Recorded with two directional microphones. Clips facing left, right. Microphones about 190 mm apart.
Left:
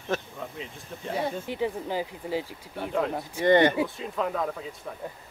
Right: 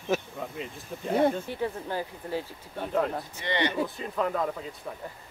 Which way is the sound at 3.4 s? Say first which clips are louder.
Left 10 dB; 50° left (ahead or behind).